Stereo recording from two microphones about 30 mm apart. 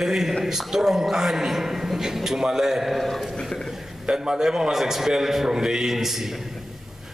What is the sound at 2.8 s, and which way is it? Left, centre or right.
Speech, centre.